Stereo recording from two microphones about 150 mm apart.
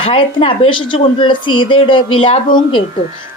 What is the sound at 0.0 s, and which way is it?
A woman's voice, 35° left (ahead or behind).